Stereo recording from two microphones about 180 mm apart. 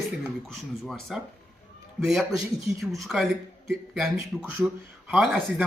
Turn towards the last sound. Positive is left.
turn(degrees=0)  # may be behind; listen again after turning